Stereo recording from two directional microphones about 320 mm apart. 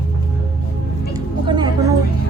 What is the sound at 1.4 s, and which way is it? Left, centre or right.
Music, centre.